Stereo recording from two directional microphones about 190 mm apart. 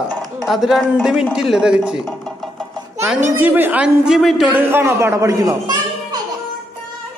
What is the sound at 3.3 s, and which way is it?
Speech, 10° right (ahead or behind).